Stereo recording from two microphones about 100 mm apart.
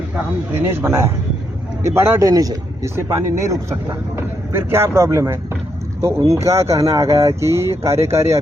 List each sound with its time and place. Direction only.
0.7 s speech: 25° right (ahead or behind)
2.3 s speech: 35° right (ahead or behind)
2.9 s speech: 25° right (ahead or behind)